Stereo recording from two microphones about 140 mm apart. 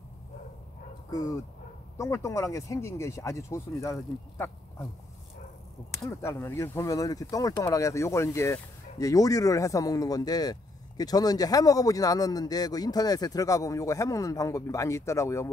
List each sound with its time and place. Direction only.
1.1 s speech: 25° left (ahead or behind)
6.0 s speech: 20° left (ahead or behind)